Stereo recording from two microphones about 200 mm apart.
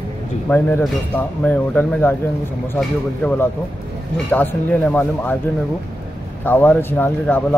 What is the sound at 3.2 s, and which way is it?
Speech, 5° left (ahead or behind).